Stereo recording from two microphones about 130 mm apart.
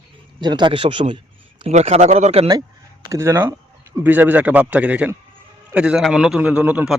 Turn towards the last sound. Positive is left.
turn(degrees=-10)  # may be behind; listen again after turning